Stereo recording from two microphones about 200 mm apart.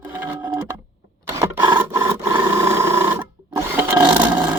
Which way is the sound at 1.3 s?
15° right (ahead or behind).